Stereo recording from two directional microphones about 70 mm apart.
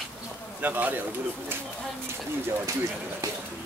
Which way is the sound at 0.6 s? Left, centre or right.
Right.